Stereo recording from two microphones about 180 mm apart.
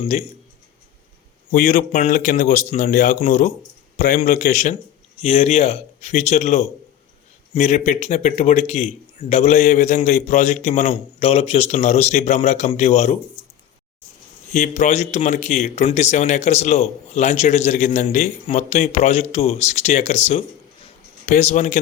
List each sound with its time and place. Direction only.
0.0 s speech: 40° left (ahead or behind)
1.5 s a man's voice: 45° left (ahead or behind)
14.5 s speech: 40° left (ahead or behind)